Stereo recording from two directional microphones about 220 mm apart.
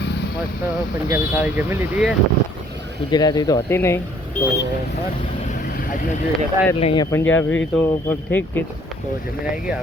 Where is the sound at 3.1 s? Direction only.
20° left (ahead or behind).